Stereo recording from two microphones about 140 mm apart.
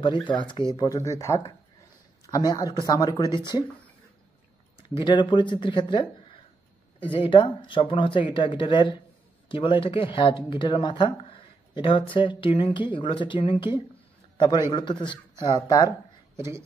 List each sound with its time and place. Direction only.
0.0 s speech: 35° left (ahead or behind)
0.7 s speech: 25° left (ahead or behind)
5.0 s speech: 35° left (ahead or behind)
16.3 s speech: 20° right (ahead or behind)